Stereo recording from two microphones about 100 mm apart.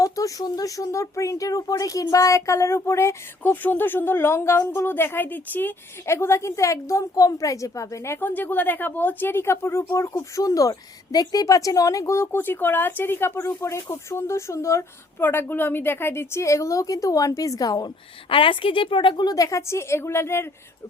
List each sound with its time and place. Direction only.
0.0 s speech: 35° left (ahead or behind)
3.4 s speech: 20° left (ahead or behind); by 17.9 s 40° left (ahead or behind)
18.3 s speech: 60° left (ahead or behind); by 20.5 s 25° left (ahead or behind)